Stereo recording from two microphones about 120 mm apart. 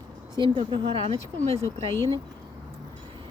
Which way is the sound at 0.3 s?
40° right (ahead or behind).